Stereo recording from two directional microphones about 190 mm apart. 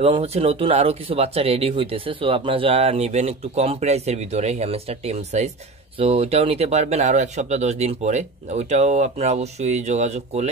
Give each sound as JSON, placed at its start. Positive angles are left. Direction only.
{"t": 0.0, "sound": "speech", "side_deg": -30}